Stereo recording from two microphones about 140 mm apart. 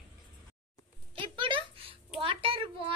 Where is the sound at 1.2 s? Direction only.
35° right (ahead or behind).